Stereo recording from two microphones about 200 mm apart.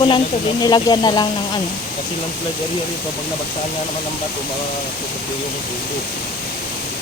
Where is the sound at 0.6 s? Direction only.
20° left (ahead or behind).